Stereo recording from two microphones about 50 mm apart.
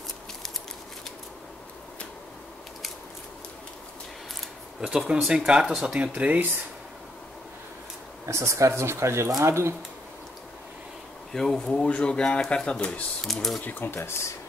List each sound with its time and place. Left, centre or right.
4.8 s speech: centre
5.9 s speech: right
8.3 s speech: right
11.3 s speech: centre
13.2 s speech: centre
13.7 s speech: left
13.9 s speech: left